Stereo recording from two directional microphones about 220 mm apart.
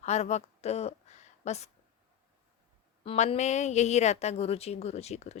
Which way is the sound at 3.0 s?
25° left (ahead or behind).